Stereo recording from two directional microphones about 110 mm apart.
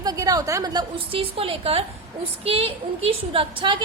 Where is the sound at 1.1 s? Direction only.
60° right (ahead or behind).